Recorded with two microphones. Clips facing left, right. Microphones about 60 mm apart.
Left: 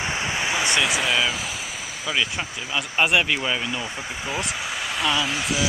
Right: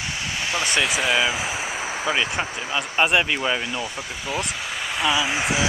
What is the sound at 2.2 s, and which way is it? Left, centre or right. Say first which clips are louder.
Speech: right 4 dB; right.